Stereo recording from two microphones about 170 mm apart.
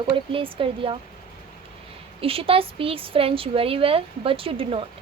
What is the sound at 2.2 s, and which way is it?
Speech, 35° right (ahead or behind).